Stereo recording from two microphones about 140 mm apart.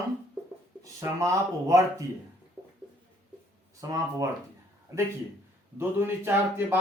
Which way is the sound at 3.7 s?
25° right (ahead or behind).